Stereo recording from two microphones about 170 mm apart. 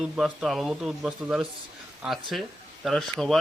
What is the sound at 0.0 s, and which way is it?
Speech, 5° right (ahead or behind).